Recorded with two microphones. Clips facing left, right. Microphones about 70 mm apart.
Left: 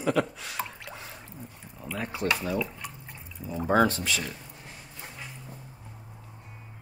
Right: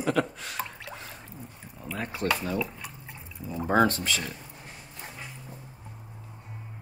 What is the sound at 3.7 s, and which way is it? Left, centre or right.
Speech, right.